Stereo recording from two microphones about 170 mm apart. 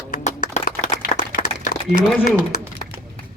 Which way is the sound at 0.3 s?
45° left (ahead or behind).